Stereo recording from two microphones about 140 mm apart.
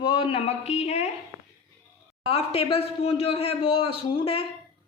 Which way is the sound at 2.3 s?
45° left (ahead or behind).